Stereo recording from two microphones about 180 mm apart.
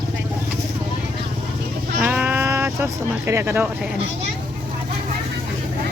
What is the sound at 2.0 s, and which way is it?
Speech, 10° right (ahead or behind).